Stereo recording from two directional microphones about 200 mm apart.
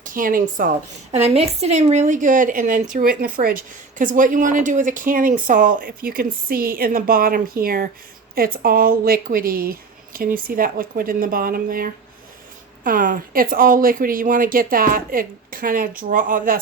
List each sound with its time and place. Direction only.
0.0 s speech: 40° right (ahead or behind)
1.1 s a woman's voice: 30° right (ahead or behind)